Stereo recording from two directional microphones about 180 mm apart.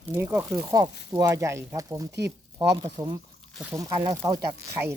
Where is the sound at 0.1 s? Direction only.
15° right (ahead or behind).